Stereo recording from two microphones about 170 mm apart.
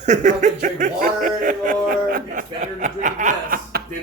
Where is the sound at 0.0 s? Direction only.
45° right (ahead or behind).